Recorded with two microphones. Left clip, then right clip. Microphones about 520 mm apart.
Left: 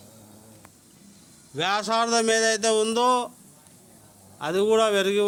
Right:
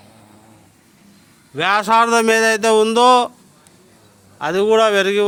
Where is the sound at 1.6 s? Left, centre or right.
Left.